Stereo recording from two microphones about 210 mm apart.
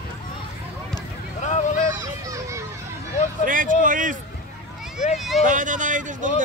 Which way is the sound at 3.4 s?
40° right (ahead or behind).